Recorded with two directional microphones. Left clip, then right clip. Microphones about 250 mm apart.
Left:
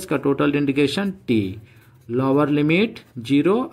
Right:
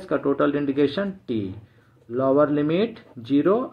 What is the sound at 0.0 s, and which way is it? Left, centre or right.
Speech, left.